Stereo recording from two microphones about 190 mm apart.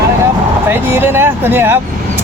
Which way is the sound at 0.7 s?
10° right (ahead or behind).